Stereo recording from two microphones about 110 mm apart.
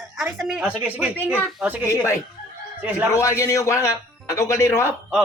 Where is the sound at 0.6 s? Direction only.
10° right (ahead or behind).